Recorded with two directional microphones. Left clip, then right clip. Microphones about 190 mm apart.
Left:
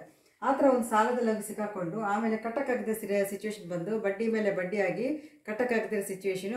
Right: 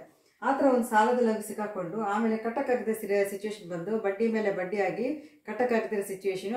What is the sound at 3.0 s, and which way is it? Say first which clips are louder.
Speech: right 2 dB; 20° left (ahead or behind).